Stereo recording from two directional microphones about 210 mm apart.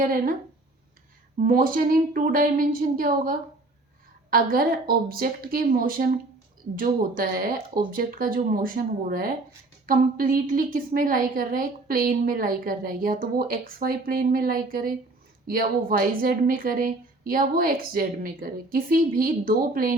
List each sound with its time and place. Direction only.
0.0 s a woman's voice: 40° right (ahead or behind)
1.5 s a woman's voice: 40° right (ahead or behind)